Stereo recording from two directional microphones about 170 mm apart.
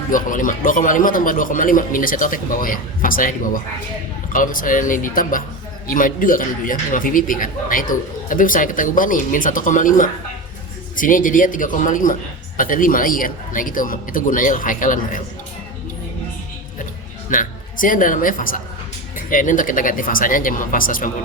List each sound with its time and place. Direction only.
0.1 s a man's voice: 50° left (ahead or behind)
17.2 s a man's voice: 50° left (ahead or behind)